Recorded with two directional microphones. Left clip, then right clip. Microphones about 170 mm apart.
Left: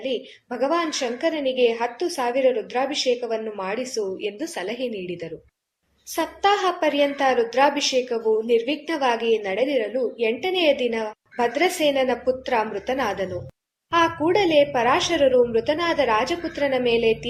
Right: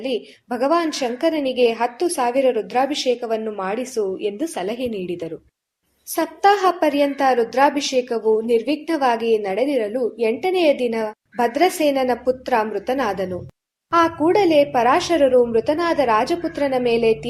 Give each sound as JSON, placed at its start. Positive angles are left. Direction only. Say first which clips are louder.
{"t": 0.0, "sound": "a woman's voice", "louder": "right 2 dB", "side_deg": -35}